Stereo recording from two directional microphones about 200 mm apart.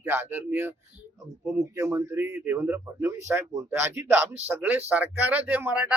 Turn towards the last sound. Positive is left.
turn(degrees=-10)  # may be behind; listen again after turning